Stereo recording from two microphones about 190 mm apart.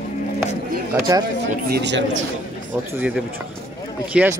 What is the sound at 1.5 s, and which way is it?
Speech, 60° right (ahead or behind).